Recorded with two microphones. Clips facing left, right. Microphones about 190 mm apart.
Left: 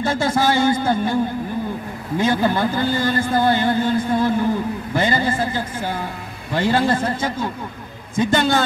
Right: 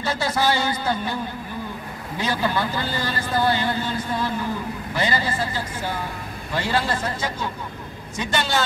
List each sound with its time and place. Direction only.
0.0 s a man's voice: 50° left (ahead or behind)
2.1 s a man's voice: 50° left (ahead or behind)
6.5 s a man's voice: 50° left (ahead or behind)